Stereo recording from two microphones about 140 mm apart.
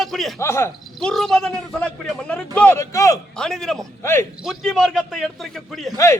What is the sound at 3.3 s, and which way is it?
Speech, 5° left (ahead or behind).